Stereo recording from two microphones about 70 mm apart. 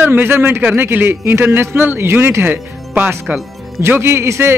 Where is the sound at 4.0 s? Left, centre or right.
Right.